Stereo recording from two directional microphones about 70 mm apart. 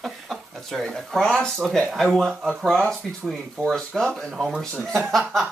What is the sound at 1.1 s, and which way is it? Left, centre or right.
Speech, centre.